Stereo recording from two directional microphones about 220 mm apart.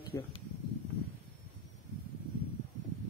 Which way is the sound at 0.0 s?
15° left (ahead or behind).